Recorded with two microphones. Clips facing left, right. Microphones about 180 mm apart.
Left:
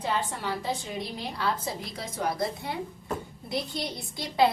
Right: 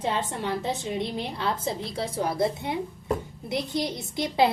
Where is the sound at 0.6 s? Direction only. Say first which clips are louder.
Right 4 dB; 20° right (ahead or behind).